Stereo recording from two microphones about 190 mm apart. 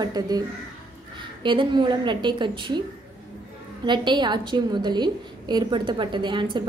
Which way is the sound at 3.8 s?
25° right (ahead or behind).